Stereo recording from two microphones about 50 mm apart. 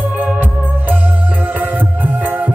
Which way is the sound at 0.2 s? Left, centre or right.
Right.